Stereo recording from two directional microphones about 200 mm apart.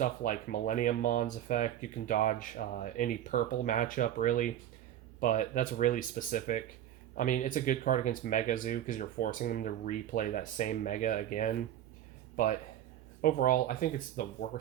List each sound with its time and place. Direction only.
0.0 s speech: 45° left (ahead or behind)
13.2 s speech: 45° left (ahead or behind)